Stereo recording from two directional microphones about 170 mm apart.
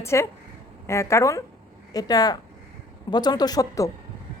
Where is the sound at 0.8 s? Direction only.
15° left (ahead or behind).